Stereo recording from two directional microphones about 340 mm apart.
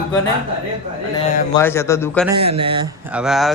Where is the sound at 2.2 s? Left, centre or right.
Centre.